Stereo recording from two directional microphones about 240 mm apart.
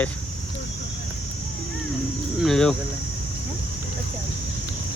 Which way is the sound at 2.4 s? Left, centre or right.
Centre.